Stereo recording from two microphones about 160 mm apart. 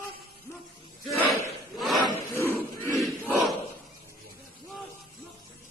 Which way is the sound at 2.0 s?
15° left (ahead or behind).